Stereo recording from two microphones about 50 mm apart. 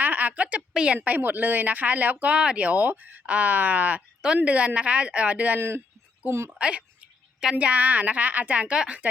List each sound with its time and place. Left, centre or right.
0.0 s a sound: right
0.7 s a woman's voice: centre
1.0 s a woman's voice: right
2.3 s a woman's voice: right
5.5 s speech: right
6.2 s a woman's voice: right
6.6 s a sound: right
7.5 s a woman's voice: right